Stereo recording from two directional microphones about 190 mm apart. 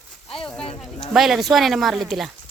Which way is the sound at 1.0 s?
Centre (ahead or behind).